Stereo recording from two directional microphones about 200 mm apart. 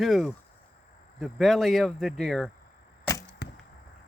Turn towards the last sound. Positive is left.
turn(degrees=55)  # may be behind; listen again after turning